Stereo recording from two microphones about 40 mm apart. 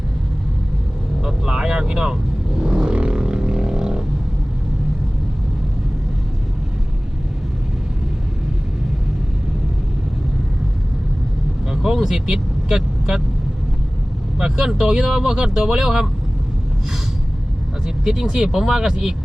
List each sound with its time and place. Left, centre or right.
1.2 s vehicle: centre
11.7 s vehicle: centre
14.3 s speech: centre
17.8 s speech: centre